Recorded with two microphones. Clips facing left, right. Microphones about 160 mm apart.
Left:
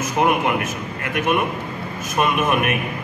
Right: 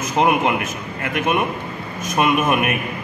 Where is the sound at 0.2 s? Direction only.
20° right (ahead or behind).